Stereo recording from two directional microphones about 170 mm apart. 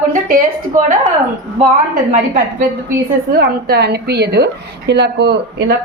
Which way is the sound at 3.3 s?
65° right (ahead or behind).